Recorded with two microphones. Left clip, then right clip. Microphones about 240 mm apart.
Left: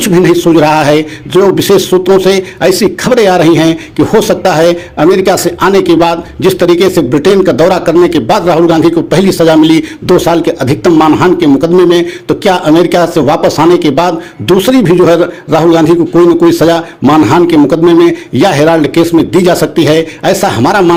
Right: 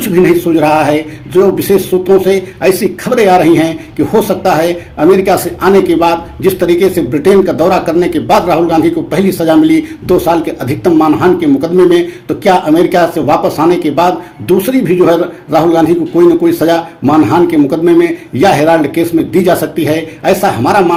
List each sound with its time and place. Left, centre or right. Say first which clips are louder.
0.0 s a man's voice: left 2 dB; left